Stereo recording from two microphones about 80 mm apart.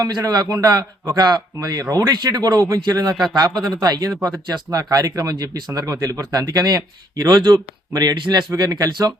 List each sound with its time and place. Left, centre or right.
0.0 s speech: right
2.1 s speech: right